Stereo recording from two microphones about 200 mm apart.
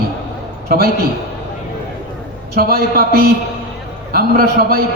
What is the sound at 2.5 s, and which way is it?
A man's voice, 50° right (ahead or behind).